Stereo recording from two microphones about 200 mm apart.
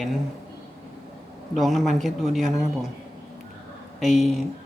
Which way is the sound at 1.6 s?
Centre (ahead or behind).